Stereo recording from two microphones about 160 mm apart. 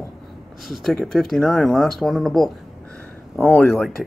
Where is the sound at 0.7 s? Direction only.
Centre (ahead or behind).